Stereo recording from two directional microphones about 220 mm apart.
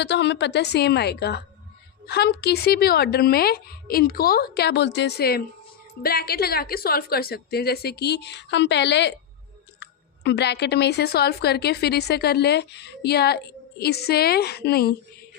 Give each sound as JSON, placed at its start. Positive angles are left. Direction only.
{"t": 0.0, "sound": "speech", "side_deg": 50}